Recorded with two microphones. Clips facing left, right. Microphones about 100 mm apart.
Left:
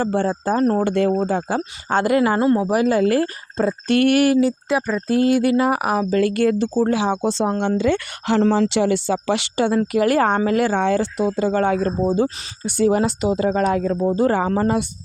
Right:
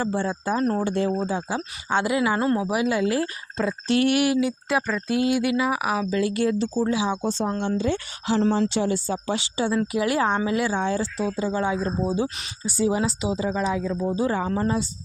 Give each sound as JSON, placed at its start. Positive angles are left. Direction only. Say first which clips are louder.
{"t": 0.0, "sound": "speech", "louder": "left 5 dB", "side_deg": 55}
{"t": 0.3, "sound": "speech", "louder": "left 5 dB", "side_deg": 40}
{"t": 0.9, "sound": "speech", "louder": "left 5 dB", "side_deg": 60}
{"t": 7.6, "sound": "speech", "louder": "left 5 dB", "side_deg": 65}